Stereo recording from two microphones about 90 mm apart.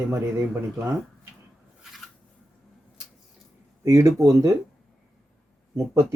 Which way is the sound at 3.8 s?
35° right (ahead or behind).